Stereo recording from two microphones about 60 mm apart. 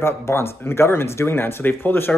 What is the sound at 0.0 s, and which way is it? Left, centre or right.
Speech, left.